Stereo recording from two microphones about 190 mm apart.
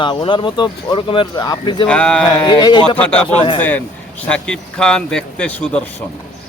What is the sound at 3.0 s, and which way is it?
A man's voice, 5° left (ahead or behind).